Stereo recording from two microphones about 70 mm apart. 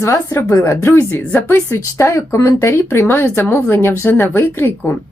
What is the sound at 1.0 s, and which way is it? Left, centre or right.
A woman's voice, left.